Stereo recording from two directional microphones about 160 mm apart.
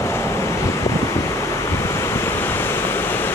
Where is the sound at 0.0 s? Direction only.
15° left (ahead or behind).